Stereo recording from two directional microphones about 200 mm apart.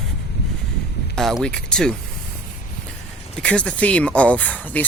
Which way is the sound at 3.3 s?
5° left (ahead or behind).